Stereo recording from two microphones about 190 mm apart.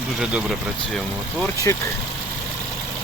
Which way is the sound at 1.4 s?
15° left (ahead or behind).